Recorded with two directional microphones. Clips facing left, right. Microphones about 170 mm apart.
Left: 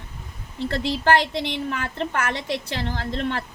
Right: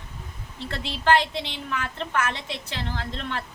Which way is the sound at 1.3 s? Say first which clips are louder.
Left 4 dB; 40° left (ahead or behind).